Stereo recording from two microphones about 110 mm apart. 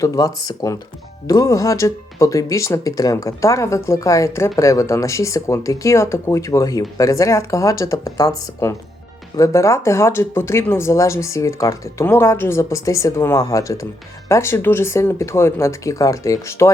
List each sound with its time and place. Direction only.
0.0 s speech: 30° left (ahead or behind)